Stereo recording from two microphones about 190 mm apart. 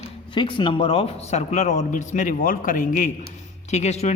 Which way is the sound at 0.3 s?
25° left (ahead or behind).